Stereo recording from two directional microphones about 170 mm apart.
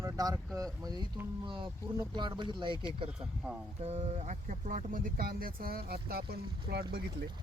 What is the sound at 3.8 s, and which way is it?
Speech, 40° right (ahead or behind).